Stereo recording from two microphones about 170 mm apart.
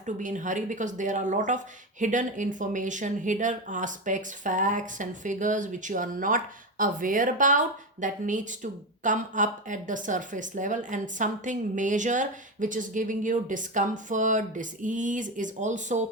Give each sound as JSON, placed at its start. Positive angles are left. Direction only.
{"t": 0.0, "sound": "speech", "side_deg": -45}